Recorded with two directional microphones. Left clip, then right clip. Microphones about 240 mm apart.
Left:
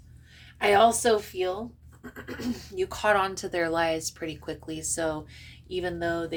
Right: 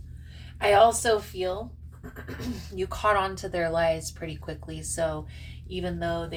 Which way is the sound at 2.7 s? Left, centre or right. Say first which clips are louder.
Even; left.